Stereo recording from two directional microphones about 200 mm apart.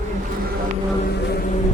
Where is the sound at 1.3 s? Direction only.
45° left (ahead or behind).